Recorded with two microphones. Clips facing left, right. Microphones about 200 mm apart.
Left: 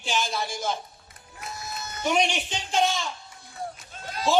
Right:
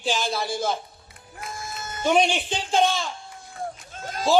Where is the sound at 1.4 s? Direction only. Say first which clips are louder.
Right 2 dB; 50° right (ahead or behind).